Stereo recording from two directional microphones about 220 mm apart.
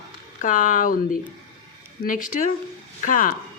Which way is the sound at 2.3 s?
35° left (ahead or behind).